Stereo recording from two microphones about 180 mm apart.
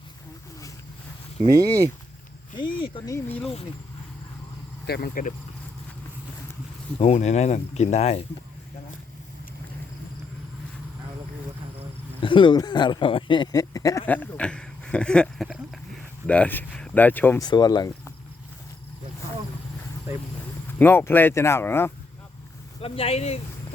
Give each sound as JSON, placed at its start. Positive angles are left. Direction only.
{"t": 1.5, "sound": "speech", "side_deg": -20}
{"t": 2.6, "sound": "speech", "side_deg": 25}
{"t": 3.2, "sound": "speech", "side_deg": 10}
{"t": 4.9, "sound": "speech", "side_deg": 60}
{"t": 7.0, "sound": "speech", "side_deg": 35}
{"t": 12.2, "sound": "speech", "side_deg": 25}
{"t": 14.1, "sound": "speech", "side_deg": 5}
{"t": 17.4, "sound": "speech", "side_deg": 20}
{"t": 20.7, "sound": "speech", "side_deg": 10}
{"t": 22.8, "sound": "speech", "side_deg": 35}